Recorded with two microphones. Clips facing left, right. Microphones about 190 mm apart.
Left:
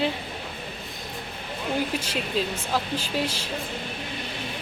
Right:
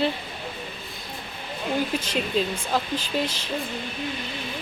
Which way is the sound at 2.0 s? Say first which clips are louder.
Right 2 dB; 10° left (ahead or behind).